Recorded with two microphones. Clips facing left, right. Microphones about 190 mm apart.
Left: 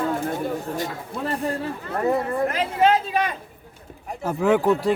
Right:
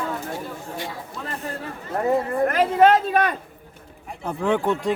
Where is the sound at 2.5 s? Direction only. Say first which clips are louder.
Right 5 dB; 50° right (ahead or behind).